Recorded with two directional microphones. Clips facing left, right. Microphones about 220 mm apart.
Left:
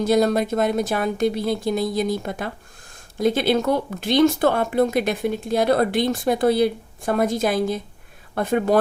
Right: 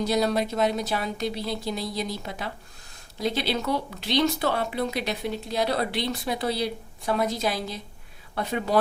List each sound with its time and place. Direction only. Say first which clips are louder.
0.0 s speech: left 6 dB; 50° left (ahead or behind)